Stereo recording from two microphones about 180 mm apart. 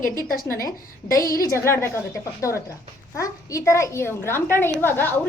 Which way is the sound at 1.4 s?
15° left (ahead or behind).